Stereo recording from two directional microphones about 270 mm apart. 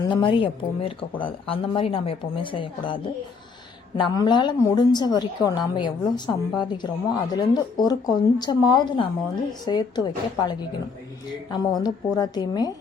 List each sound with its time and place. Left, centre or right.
0.0 s a woman's voice: centre